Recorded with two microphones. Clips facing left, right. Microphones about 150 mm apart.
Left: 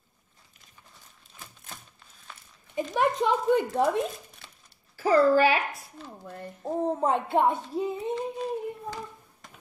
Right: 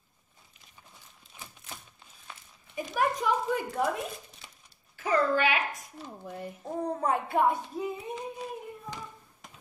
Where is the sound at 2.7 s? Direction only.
25° left (ahead or behind).